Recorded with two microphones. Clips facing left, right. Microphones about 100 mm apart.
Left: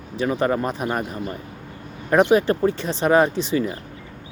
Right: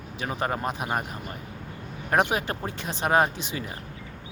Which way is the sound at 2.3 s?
15° right (ahead or behind).